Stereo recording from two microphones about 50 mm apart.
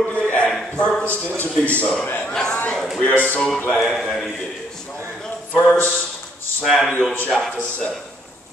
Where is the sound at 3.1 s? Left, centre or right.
Left.